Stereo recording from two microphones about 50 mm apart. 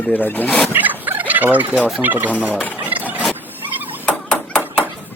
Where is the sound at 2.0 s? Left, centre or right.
Right.